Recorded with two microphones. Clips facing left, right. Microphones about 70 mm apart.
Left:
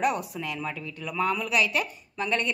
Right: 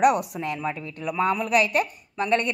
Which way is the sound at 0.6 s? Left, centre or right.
Right.